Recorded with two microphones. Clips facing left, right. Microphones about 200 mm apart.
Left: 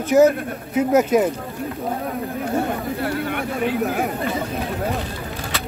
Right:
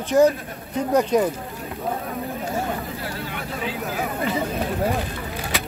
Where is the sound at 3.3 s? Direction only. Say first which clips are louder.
Left 7 dB; 55° left (ahead or behind).